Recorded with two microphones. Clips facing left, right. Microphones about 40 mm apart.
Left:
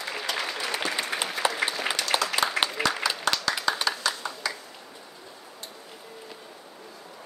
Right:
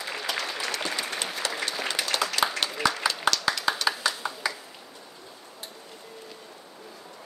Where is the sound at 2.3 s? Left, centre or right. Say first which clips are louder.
Left 1 dB; centre.